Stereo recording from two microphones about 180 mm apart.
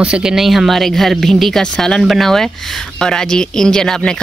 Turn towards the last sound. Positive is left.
turn(degrees=5)  # may be behind; listen again after turning